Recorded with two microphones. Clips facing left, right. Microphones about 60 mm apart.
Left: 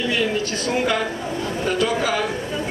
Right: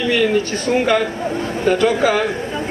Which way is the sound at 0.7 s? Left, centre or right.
Right.